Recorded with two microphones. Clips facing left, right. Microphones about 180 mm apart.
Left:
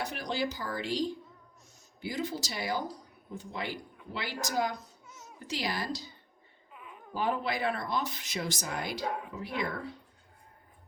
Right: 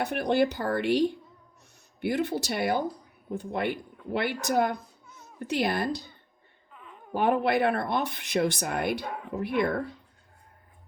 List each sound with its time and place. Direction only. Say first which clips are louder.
0.0 s speech: right 9 dB; 60° right (ahead or behind)